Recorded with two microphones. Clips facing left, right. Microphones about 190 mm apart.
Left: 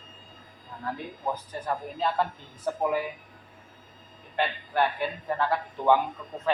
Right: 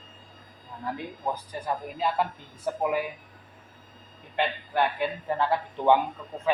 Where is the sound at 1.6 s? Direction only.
10° right (ahead or behind).